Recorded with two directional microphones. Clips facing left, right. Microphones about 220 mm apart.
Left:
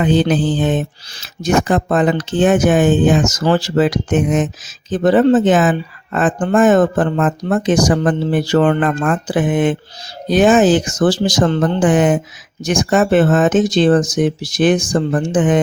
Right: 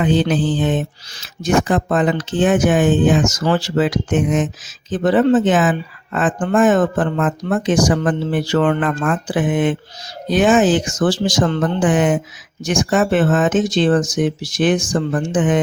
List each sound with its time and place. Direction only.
0.0 s speech: 40° left (ahead or behind)